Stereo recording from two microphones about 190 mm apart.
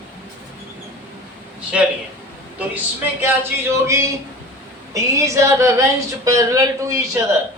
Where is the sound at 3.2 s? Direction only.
15° right (ahead or behind).